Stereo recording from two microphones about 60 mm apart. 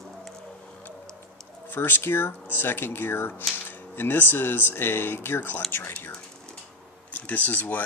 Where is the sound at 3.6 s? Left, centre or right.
Left.